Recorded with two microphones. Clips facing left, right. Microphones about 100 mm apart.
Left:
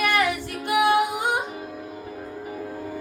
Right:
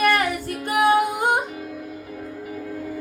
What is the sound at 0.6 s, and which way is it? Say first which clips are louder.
Music: right 2 dB; 45° right (ahead or behind).